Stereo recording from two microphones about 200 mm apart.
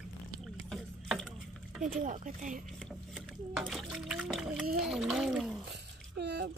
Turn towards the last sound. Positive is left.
turn(degrees=-55)  # may be behind; listen again after turning